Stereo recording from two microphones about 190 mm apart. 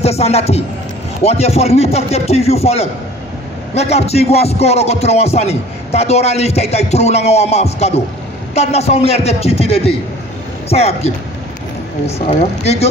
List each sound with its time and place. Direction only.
0.0 s music: 35° left (ahead or behind)
12.3 s music: 35° left (ahead or behind)